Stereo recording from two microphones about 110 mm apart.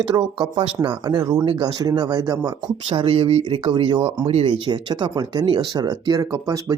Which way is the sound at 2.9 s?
55° right (ahead or behind).